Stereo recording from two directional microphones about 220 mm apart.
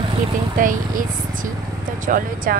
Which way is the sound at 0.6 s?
40° right (ahead or behind).